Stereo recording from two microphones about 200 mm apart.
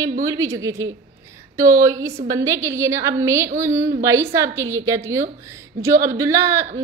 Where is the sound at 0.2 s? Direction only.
15° right (ahead or behind).